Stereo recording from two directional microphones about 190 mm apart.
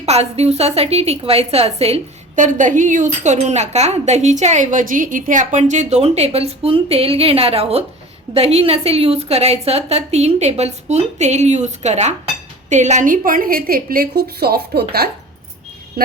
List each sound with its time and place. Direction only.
0.0 s a woman's voice: 35° right (ahead or behind); by 15.1 s 55° right (ahead or behind)